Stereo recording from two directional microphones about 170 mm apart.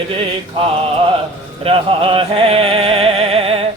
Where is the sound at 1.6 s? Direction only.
30° right (ahead or behind).